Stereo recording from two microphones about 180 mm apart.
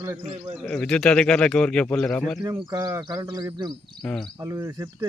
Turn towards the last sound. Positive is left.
turn(degrees=-20)  # may be behind; listen again after turning